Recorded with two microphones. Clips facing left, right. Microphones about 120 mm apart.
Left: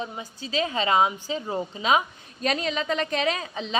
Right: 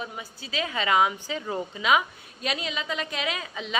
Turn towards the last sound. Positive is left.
turn(degrees=30)  # may be behind; listen again after turning